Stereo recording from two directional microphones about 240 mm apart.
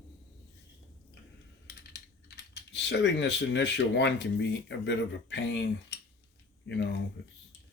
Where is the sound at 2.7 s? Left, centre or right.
Left.